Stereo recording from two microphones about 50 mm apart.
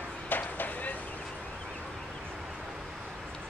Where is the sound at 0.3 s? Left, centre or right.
Left.